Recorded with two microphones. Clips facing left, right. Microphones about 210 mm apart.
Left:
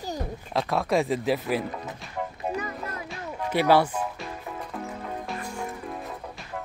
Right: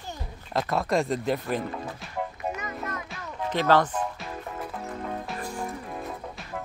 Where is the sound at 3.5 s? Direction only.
10° left (ahead or behind).